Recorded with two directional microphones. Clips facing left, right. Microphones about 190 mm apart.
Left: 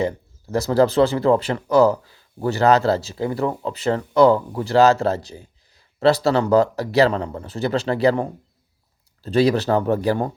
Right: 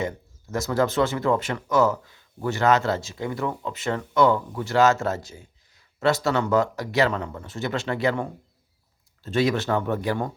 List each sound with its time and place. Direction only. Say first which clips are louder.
0.0 s speech: left 6 dB; 35° left (ahead or behind)